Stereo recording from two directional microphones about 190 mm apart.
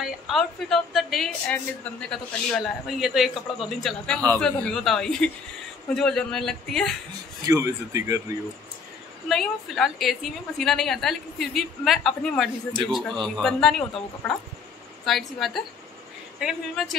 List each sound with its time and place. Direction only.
0.0 s a woman's voice: centre (ahead or behind)
7.4 s speech: 15° right (ahead or behind)
9.3 s a woman's voice: centre (ahead or behind)